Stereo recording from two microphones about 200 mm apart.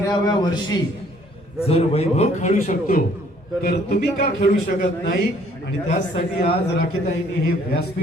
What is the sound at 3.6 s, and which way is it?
A man's voice, 50° left (ahead or behind).